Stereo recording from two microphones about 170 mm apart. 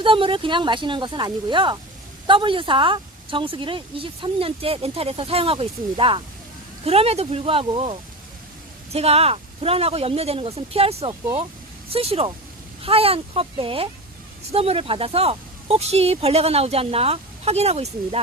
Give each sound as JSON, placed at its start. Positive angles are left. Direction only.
{"t": 0.0, "sound": "speech", "side_deg": -30}